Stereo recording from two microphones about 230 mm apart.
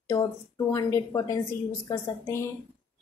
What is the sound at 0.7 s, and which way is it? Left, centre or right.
Speech, centre.